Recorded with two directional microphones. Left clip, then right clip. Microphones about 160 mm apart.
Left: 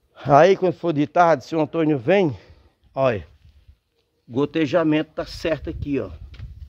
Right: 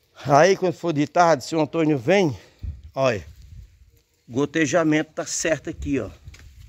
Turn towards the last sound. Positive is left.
turn(degrees=0)  # may be behind; listen again after turning